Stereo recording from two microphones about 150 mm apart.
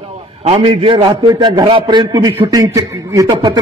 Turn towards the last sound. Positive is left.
turn(degrees=-25)  # may be behind; listen again after turning